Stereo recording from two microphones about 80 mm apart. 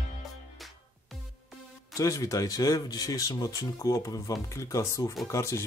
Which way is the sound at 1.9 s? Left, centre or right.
Left.